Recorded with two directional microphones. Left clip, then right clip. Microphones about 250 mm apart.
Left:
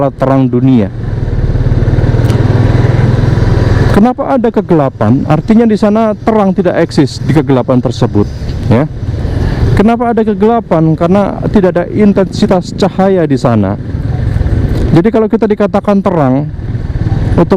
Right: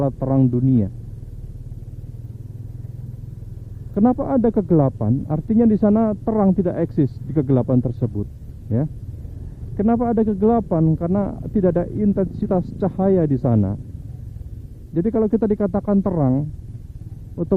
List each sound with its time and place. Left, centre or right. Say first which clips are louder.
0.0 s speech: left 11 dB; centre
3.8 s speech: left 9 dB; centre
5.5 s speech: left 7 dB; centre
7.9 s speech: left 16 dB; centre
9.8 s speech: left 9 dB; centre
13.1 s speech: left 10 dB; centre
15.0 s speech: left 7 dB; centre